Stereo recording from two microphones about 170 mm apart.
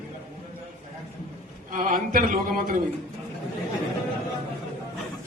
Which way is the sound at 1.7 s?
50° right (ahead or behind).